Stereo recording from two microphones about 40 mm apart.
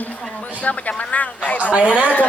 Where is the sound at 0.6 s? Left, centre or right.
Left.